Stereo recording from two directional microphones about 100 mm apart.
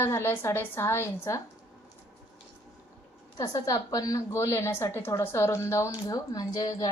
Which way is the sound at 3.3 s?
35° left (ahead or behind).